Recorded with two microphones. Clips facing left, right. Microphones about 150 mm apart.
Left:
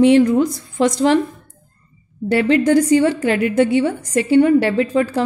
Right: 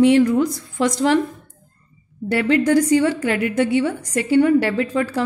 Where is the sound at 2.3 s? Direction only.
25° left (ahead or behind).